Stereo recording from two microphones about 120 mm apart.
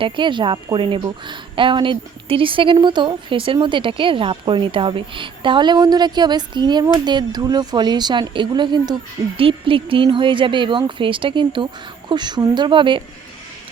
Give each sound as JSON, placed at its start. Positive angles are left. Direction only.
{"t": 0.0, "sound": "a woman's voice", "side_deg": -40}